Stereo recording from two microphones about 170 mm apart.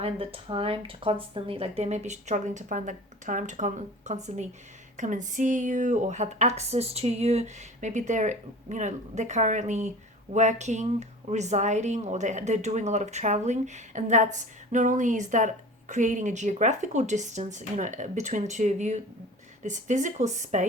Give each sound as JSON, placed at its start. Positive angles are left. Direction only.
{"t": 0.0, "sound": "speech", "side_deg": -35}